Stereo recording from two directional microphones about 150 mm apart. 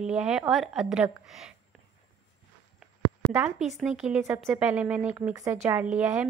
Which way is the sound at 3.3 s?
5° right (ahead or behind).